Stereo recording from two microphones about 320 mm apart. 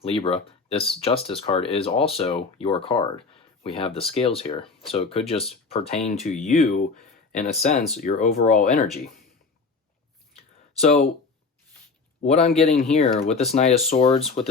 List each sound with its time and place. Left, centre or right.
0.0 s speech: centre
10.8 s speech: centre
12.2 s speech: left